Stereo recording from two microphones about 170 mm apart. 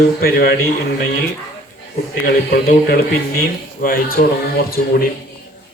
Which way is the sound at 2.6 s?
60° left (ahead or behind).